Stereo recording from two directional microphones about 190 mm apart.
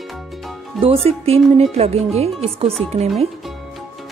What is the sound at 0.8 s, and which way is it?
A woman's voice, 30° right (ahead or behind).